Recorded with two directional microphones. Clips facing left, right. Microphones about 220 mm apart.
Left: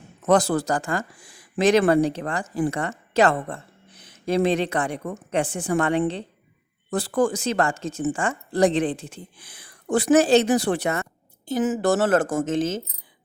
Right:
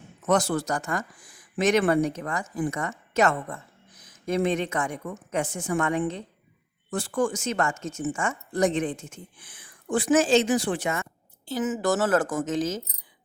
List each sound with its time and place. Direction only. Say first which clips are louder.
0.3 s speech: left 4 dB; 35° left (ahead or behind)
9.9 s speech: left 4 dB; 70° left (ahead or behind)
11.6 s speech: left 3 dB; 30° left (ahead or behind)